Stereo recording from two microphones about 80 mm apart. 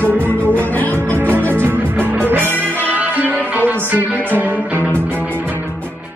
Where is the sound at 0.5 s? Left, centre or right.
Left.